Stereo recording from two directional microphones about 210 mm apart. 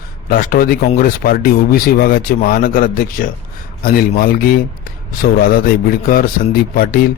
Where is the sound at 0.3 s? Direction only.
45° left (ahead or behind).